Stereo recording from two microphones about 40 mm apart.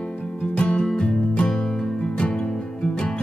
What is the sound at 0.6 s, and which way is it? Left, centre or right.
Music, left.